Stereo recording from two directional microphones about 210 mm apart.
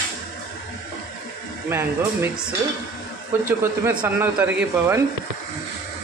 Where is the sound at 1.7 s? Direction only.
10° right (ahead or behind).